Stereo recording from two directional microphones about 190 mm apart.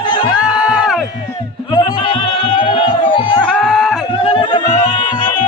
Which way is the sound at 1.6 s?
25° left (ahead or behind).